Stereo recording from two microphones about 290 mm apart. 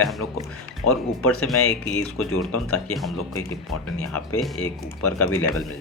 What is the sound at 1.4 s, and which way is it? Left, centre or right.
Speech, centre.